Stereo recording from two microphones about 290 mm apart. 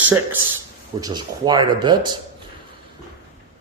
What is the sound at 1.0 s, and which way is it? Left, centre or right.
Speech, centre.